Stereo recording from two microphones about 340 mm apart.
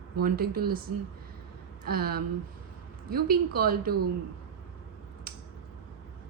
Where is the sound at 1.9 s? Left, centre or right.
Right.